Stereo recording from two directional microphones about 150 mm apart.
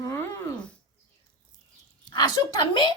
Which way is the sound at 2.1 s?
30° left (ahead or behind).